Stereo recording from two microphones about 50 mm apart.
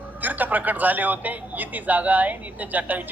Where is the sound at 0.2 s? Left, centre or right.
Right.